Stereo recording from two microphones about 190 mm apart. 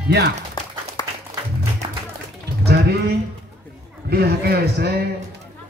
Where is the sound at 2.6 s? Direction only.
55° right (ahead or behind).